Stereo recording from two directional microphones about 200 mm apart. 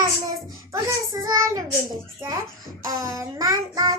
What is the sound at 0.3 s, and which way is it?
Child singing, 20° right (ahead or behind).